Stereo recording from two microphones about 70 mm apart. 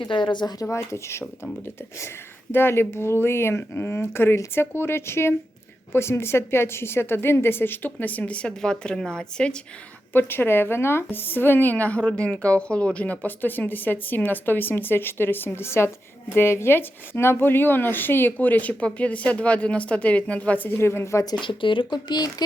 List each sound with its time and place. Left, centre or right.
0.0 s speech: left
0.6 s speech: left
2.5 s a woman's voice: left; by 9.6 s centre
10.1 s a woman's voice: left
20.7 s a woman's voice: left
21.8 s speech: left